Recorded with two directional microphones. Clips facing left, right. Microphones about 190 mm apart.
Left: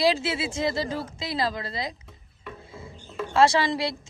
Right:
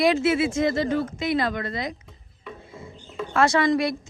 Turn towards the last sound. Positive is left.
turn(degrees=30)  # may be behind; listen again after turning